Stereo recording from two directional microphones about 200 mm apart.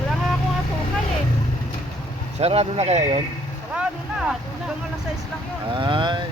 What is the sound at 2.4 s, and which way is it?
Speech, 30° right (ahead or behind).